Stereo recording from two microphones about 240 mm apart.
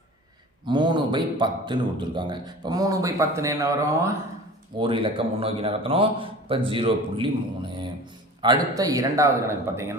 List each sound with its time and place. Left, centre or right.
0.6 s a man's voice: centre